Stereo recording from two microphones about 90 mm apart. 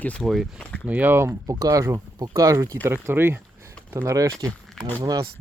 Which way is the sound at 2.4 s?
35° right (ahead or behind).